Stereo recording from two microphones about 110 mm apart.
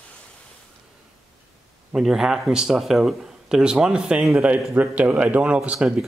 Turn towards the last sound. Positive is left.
turn(degrees=-10)  # may be behind; listen again after turning